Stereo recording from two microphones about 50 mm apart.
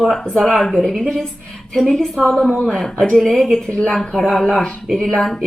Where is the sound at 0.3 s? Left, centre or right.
Centre.